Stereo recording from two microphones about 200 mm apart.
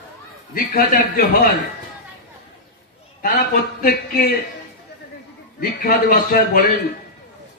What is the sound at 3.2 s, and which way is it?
Speech, 45° left (ahead or behind).